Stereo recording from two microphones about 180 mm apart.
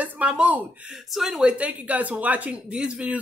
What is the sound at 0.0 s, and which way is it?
Speech, 10° right (ahead or behind).